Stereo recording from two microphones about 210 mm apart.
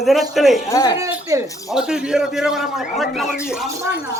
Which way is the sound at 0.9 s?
15° right (ahead or behind).